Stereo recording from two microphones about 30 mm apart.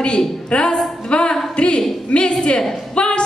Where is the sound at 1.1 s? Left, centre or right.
Left.